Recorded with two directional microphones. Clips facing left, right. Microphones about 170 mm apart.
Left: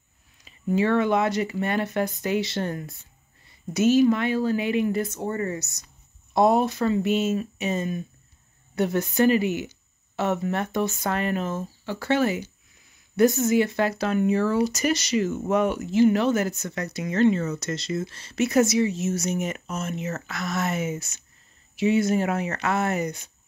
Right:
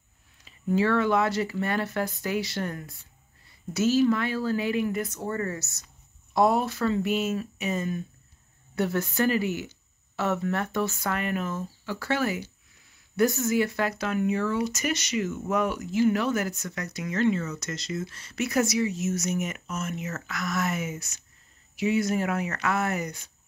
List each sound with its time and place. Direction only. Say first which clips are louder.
0.5 s a woman's voice: left 2 dB; 20° left (ahead or behind)
11.1 s speech: left 4 dB; 30° left (ahead or behind)